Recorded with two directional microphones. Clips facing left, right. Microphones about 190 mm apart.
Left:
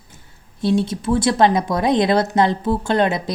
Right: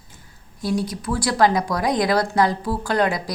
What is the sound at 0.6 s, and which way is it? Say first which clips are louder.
Speech: left 5 dB; 25° left (ahead or behind).